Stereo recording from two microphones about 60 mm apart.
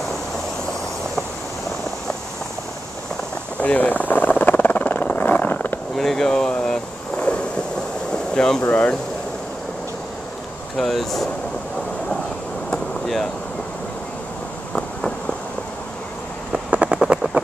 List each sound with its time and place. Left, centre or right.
3.5 s vehicle: left
5.9 s a sound: centre
7.2 s thunder: centre
8.4 s speech: centre
10.8 s speech: centre
14.7 s fireworks: centre
16.7 s a sound: right